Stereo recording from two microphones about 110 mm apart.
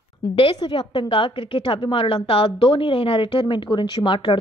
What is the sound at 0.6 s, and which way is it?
A woman's voice, 45° left (ahead or behind).